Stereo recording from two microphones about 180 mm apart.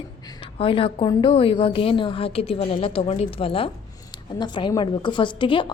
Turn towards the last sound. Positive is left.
turn(degrees=25)  # may be behind; listen again after turning